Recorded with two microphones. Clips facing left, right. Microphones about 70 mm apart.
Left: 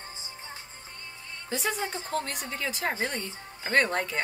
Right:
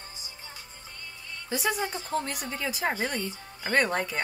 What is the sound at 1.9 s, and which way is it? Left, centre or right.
Speech, left.